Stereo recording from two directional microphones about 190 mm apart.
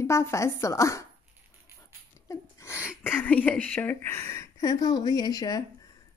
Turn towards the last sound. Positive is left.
turn(degrees=20)  # may be behind; listen again after turning